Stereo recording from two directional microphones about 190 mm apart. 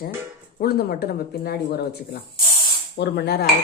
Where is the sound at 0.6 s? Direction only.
55° left (ahead or behind).